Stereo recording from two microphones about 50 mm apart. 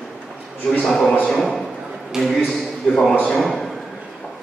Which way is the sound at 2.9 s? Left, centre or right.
Left.